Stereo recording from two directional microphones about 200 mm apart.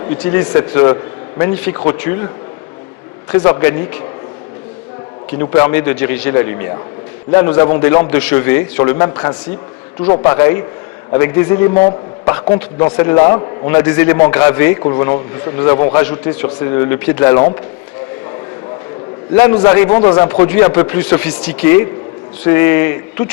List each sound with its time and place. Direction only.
0.1 s a man's voice: 10° left (ahead or behind)
3.3 s a man's voice: 15° left (ahead or behind)
5.4 s a man's voice: 15° left (ahead or behind)
19.3 s a man's voice: 15° left (ahead or behind)